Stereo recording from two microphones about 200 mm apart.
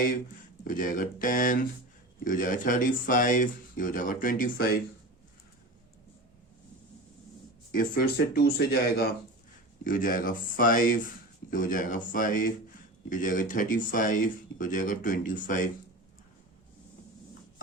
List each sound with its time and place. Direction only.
0.6 s speech: 40° left (ahead or behind)
7.7 s speech: 45° left (ahead or behind)